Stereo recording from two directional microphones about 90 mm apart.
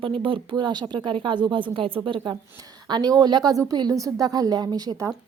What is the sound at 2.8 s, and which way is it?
A woman's voice, 50° right (ahead or behind).